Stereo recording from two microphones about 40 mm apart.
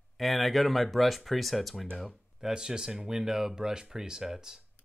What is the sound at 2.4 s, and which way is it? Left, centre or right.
Speech, centre.